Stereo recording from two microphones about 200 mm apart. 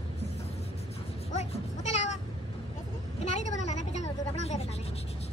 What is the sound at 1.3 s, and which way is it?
Goat, 35° left (ahead or behind).